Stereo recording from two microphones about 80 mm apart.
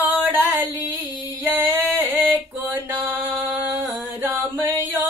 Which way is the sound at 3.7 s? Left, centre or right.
Right.